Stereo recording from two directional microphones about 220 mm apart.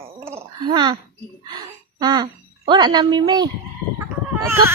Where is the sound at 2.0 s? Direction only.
20° right (ahead or behind).